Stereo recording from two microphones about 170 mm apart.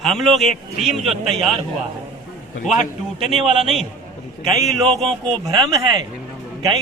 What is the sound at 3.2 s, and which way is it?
Speech, centre (ahead or behind).